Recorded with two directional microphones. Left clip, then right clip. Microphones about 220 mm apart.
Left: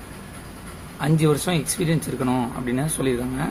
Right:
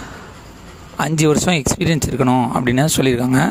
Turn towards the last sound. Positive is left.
turn(degrees=-50)  # may be behind; listen again after turning